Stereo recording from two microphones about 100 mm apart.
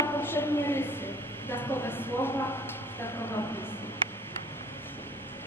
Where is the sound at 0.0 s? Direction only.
25° left (ahead or behind).